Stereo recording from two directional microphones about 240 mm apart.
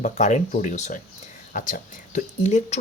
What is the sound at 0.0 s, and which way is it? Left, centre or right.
Speech, left.